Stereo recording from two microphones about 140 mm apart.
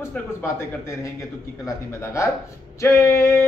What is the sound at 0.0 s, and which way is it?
Speech, 15° left (ahead or behind).